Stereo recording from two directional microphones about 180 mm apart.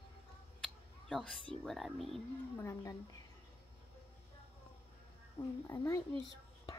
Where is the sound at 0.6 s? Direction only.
5° left (ahead or behind).